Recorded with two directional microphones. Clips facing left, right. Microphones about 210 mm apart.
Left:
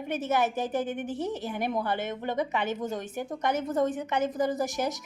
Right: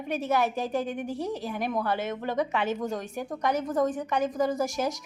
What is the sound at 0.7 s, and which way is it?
Speech, centre (ahead or behind).